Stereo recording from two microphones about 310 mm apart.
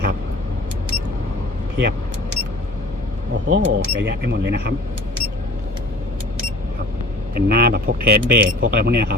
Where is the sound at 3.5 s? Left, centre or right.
Right.